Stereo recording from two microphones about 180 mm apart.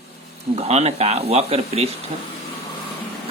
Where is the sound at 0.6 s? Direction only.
35° right (ahead or behind).